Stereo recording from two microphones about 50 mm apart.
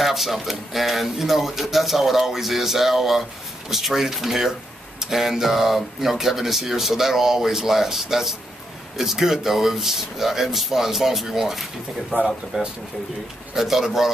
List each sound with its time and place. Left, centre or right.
0.0 s speech: centre
12.1 s speech: right
12.5 s speech: centre
13.6 s speech: centre